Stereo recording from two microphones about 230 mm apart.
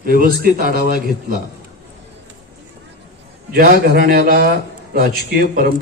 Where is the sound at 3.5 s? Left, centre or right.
Right.